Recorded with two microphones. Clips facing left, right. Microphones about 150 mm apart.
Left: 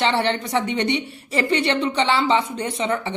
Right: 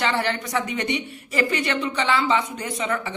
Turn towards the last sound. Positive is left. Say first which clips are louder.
# left 3 dB
turn(degrees=25)  # may be behind; listen again after turning